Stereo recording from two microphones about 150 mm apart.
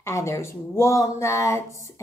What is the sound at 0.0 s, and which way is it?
A woman's voice, 20° left (ahead or behind).